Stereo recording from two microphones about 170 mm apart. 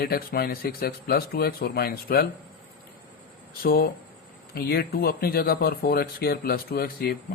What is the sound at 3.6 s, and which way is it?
Speech, 60° left (ahead or behind).